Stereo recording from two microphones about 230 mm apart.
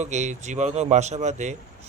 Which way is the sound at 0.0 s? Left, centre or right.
Right.